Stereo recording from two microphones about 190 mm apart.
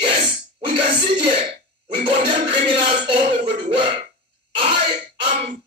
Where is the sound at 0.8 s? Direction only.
30° right (ahead or behind).